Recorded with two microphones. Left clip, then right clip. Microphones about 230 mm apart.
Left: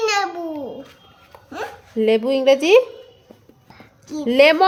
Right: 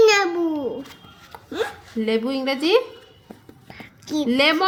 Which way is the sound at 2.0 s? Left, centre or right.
Left.